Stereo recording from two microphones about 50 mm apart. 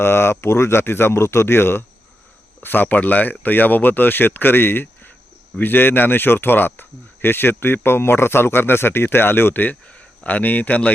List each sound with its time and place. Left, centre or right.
0.0 s speech: left
2.6 s speech: left
9.8 s speech: left